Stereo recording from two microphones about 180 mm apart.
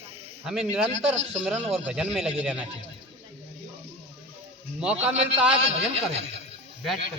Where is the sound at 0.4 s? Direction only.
5° right (ahead or behind).